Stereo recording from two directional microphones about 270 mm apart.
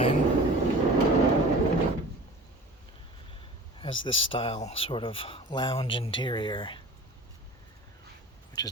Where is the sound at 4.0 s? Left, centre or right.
Centre.